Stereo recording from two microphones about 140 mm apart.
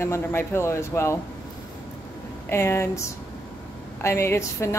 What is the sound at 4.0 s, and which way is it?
Speech, 20° left (ahead or behind).